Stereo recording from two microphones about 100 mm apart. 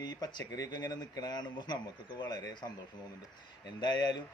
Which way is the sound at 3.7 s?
45° left (ahead or behind).